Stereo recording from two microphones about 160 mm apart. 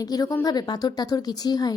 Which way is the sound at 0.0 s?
25° left (ahead or behind).